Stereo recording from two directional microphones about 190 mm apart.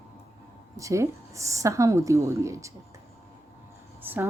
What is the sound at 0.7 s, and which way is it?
A woman's voice, 15° right (ahead or behind).